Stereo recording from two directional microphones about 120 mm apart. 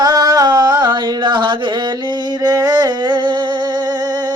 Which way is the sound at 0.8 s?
40° right (ahead or behind).